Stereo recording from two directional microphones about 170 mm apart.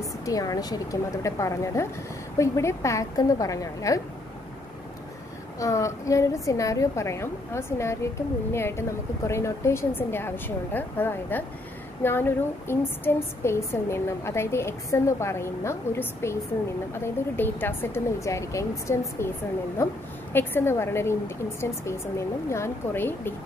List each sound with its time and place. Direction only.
0.0 s a woman's voice: 20° left (ahead or behind)
5.6 s speech: 20° left (ahead or behind)